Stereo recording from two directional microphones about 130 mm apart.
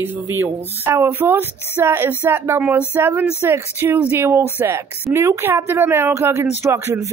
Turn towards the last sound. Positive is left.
turn(degrees=-20)  # may be behind; listen again after turning